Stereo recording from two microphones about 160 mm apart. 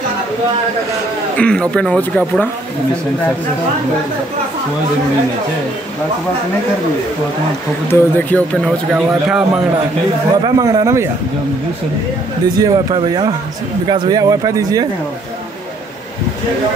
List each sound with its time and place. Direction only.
1.3 s speech: 5° left (ahead or behind)
7.9 s speech: 10° left (ahead or behind)
8.6 s a man's voice: centre (ahead or behind)
10.3 s speech: 25° right (ahead or behind)
12.5 s speech: 25° right (ahead or behind)